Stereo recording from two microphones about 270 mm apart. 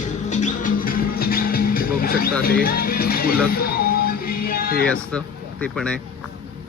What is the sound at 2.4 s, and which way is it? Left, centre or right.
Speech, left.